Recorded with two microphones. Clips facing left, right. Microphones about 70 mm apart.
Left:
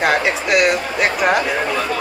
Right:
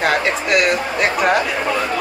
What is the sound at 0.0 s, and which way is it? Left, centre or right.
Speech, centre.